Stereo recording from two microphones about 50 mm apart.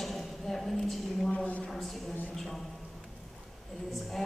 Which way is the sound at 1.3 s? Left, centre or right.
Left.